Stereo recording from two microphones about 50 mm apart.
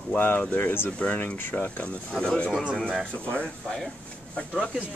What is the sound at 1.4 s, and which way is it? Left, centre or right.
Speech, left.